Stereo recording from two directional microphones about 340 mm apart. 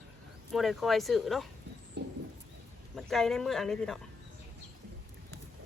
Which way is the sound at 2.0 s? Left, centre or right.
Right.